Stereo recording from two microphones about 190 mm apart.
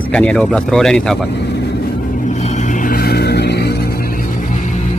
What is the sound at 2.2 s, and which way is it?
Vehicle, 40° left (ahead or behind).